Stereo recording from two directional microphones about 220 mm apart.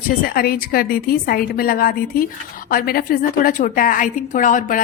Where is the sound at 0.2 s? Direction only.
40° left (ahead or behind).